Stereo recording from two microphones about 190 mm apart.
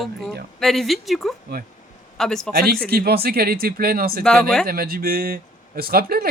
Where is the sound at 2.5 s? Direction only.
50° right (ahead or behind).